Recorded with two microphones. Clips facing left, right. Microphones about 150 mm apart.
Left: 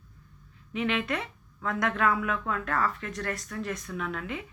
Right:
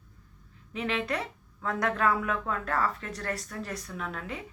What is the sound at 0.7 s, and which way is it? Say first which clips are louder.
Speech: left 2 dB; 35° right (ahead or behind).